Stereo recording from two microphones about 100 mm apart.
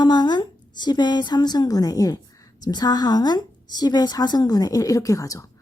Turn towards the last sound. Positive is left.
turn(degrees=35)  # may be behind; listen again after turning